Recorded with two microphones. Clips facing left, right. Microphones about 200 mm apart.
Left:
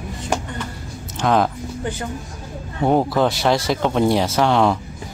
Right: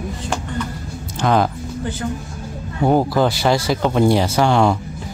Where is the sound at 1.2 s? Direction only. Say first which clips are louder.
Right 1 dB; centre (ahead or behind).